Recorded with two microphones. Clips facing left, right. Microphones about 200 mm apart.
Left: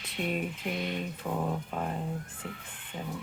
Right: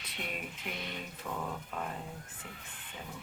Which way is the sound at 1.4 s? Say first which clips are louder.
Left 6 dB; 35° left (ahead or behind).